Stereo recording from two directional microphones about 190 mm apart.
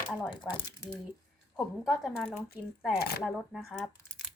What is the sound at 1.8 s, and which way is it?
Speech, centre (ahead or behind).